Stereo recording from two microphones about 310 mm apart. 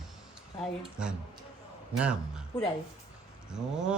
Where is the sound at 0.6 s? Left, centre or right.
Centre.